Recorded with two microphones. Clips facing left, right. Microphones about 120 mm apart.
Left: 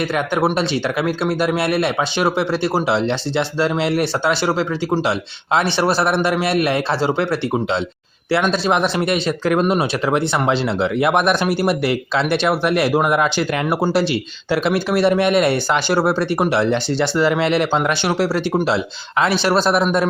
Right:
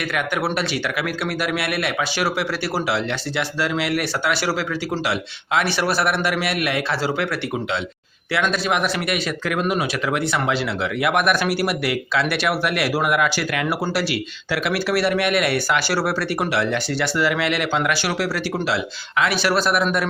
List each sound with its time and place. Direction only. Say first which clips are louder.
0.4 s speech: left 5 dB; 25° left (ahead or behind)